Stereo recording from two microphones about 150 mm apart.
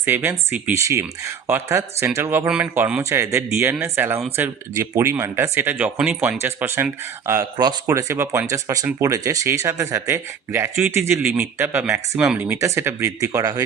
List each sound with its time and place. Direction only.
0.0 s speech: 15° right (ahead or behind)
7.5 s speech: 30° right (ahead or behind)